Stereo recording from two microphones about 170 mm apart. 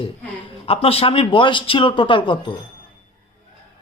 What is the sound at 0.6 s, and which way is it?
Speech, 35° left (ahead or behind).